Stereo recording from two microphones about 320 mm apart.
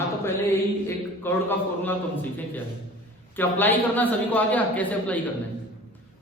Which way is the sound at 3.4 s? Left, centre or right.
Centre.